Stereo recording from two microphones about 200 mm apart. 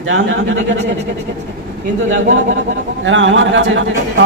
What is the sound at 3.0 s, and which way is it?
A man's voice, 70° right (ahead or behind).